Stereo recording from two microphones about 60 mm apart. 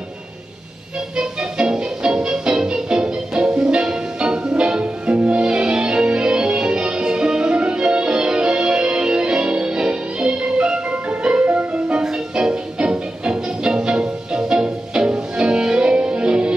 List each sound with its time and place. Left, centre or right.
1.1 s music: centre